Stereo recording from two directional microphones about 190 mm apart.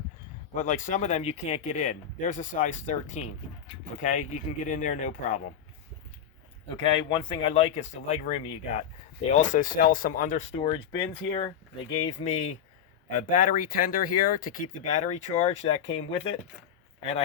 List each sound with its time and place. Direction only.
0.5 s speech: 45° left (ahead or behind)
6.7 s speech: 30° left (ahead or behind)
10.6 s speech: 25° left (ahead or behind)